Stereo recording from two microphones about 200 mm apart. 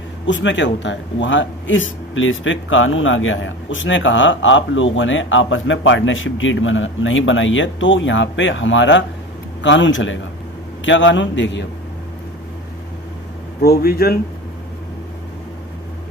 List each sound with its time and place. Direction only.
0.3 s speech: 65° left (ahead or behind)
13.6 s speech: 50° left (ahead or behind)